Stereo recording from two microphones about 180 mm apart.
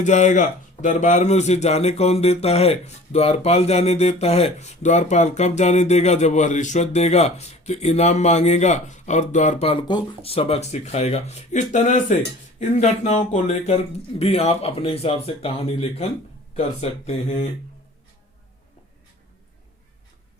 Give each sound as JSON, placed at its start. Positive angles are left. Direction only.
{"t": 0.0, "sound": "a man's voice", "side_deg": 40}